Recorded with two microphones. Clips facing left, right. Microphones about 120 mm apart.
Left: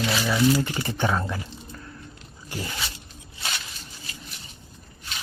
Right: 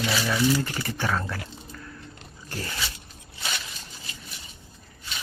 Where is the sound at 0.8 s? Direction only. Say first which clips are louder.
Left 3 dB; 20° left (ahead or behind).